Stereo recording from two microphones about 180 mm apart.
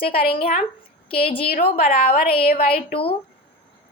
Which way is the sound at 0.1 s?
60° left (ahead or behind).